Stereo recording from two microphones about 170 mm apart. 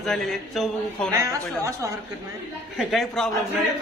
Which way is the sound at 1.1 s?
20° right (ahead or behind).